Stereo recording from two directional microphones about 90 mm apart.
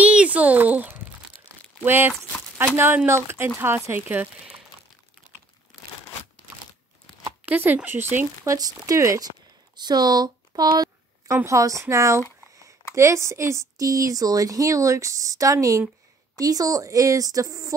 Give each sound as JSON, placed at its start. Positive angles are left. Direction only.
{"t": 0.0, "sound": "a sound", "side_deg": -15}
{"t": 1.9, "sound": "speech", "side_deg": -25}
{"t": 7.4, "sound": "speech", "side_deg": -20}
{"t": 8.5, "sound": "speech", "side_deg": -40}
{"t": 9.8, "sound": "a sound", "side_deg": -50}
{"t": 11.4, "sound": "speech", "side_deg": -35}